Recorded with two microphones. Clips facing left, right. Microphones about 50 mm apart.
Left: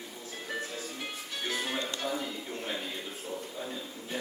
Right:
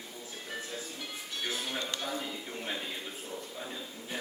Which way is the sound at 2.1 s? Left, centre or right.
Centre.